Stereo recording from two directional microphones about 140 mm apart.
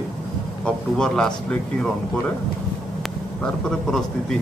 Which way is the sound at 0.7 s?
5° left (ahead or behind).